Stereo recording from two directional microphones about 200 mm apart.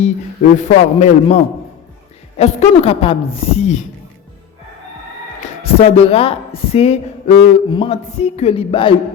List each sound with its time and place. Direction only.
0.5 s speech: 35° left (ahead or behind)
2.4 s speech: 30° left (ahead or behind)
5.6 s speech: 30° left (ahead or behind)